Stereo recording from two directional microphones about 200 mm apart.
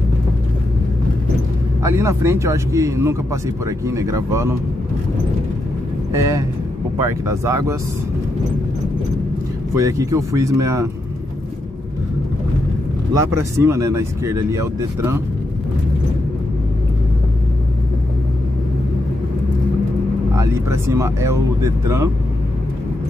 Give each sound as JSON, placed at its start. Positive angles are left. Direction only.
{"t": 1.8, "sound": "speech", "side_deg": -15}
{"t": 6.1, "sound": "speech", "side_deg": -15}
{"t": 9.8, "sound": "speech", "side_deg": -15}
{"t": 13.1, "sound": "speech", "side_deg": -15}
{"t": 20.3, "sound": "speech", "side_deg": -15}